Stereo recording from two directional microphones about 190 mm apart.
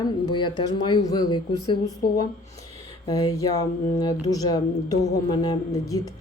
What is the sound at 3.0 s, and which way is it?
Speech, 20° left (ahead or behind).